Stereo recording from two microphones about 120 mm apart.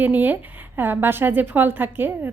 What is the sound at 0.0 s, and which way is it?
A woman's voice, 15° right (ahead or behind).